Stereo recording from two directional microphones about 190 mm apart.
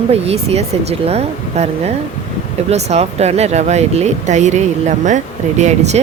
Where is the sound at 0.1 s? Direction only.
35° right (ahead or behind).